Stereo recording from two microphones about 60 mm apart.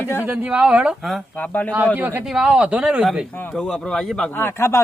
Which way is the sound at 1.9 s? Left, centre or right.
Right.